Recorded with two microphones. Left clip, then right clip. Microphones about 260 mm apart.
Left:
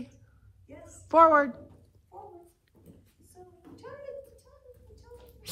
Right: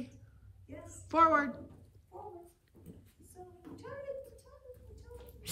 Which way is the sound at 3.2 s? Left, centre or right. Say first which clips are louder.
Even; centre.